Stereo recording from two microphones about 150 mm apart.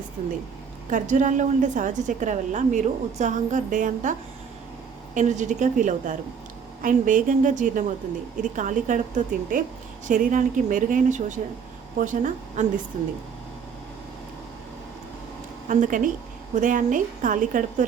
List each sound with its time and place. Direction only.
0.9 s a woman's voice: 55° right (ahead or behind)
5.1 s a woman's voice: 55° right (ahead or behind)
15.6 s a woman's voice: 55° right (ahead or behind)